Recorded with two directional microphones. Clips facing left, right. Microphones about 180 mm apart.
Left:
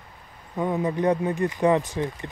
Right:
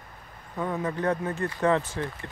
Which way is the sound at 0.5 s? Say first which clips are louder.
Left 5 dB; 15° left (ahead or behind).